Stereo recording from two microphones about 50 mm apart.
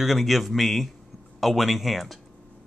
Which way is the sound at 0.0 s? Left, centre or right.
Centre.